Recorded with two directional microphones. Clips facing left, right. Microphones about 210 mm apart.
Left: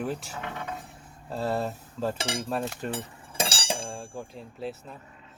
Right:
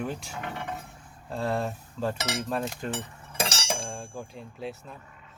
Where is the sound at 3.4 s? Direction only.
30° left (ahead or behind).